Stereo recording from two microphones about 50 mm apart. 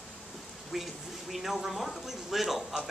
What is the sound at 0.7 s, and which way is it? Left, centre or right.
Speech, centre.